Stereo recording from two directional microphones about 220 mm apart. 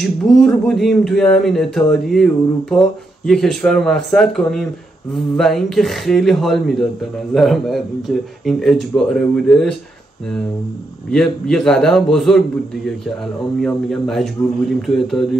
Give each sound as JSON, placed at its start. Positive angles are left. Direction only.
{"t": 0.0, "sound": "speech", "side_deg": 0}
{"t": 11.1, "sound": "speech", "side_deg": 0}